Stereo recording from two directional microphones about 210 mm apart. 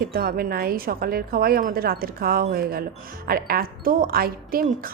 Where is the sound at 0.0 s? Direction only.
45° right (ahead or behind).